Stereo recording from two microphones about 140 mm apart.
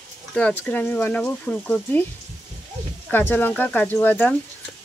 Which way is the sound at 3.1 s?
15° left (ahead or behind).